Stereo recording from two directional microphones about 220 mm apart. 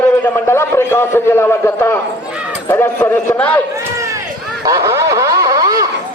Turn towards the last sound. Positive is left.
turn(degrees=-15)  # may be behind; listen again after turning